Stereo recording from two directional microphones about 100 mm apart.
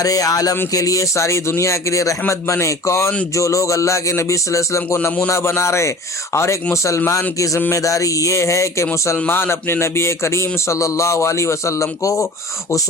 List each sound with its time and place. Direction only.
0.0 s speech: 35° left (ahead or behind)
8.9 s speech: 20° left (ahead or behind)